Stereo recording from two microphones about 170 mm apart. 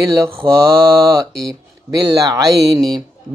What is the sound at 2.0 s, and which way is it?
Speech, 25° right (ahead or behind).